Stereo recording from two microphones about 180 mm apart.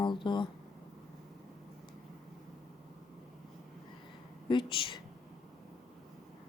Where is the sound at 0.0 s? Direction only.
25° left (ahead or behind).